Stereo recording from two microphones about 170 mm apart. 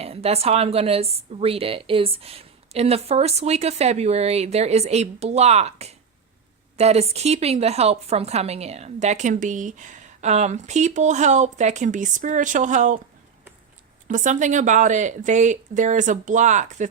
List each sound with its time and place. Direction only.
0.0 s a woman's voice: 35° right (ahead or behind)
14.1 s a woman's voice: 45° right (ahead or behind)